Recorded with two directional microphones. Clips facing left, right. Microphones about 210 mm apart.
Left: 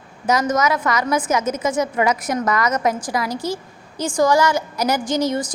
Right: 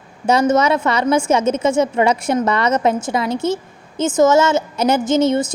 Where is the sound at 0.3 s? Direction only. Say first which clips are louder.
Right 4 dB; 30° right (ahead or behind).